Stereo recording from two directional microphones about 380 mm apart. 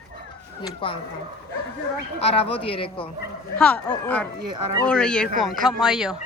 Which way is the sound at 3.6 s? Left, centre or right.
Centre.